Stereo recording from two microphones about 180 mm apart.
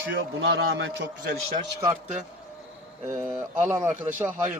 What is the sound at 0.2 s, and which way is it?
A man's voice, 70° right (ahead or behind).